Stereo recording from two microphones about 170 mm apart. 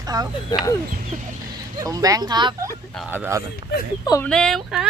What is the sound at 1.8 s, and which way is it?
Speech, 20° right (ahead or behind).